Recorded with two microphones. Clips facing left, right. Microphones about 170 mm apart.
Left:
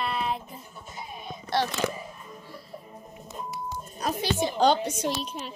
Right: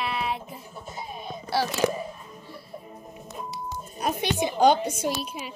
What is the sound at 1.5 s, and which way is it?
Speech, 5° right (ahead or behind).